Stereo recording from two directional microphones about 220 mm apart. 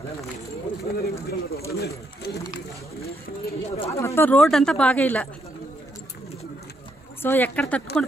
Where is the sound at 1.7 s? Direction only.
45° left (ahead or behind).